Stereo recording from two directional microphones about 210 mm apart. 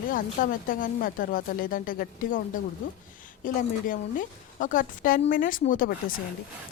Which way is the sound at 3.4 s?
40° left (ahead or behind).